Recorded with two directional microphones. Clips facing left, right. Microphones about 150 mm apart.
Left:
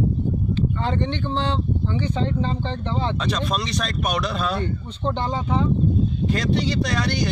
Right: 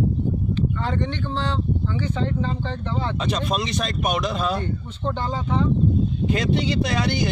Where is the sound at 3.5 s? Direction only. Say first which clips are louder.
Right 1 dB; 15° right (ahead or behind).